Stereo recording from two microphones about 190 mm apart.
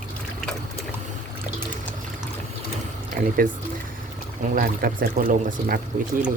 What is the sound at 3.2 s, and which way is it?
Speech, 45° right (ahead or behind).